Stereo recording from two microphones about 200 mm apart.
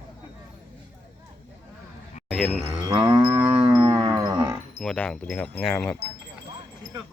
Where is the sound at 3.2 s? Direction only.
5° right (ahead or behind).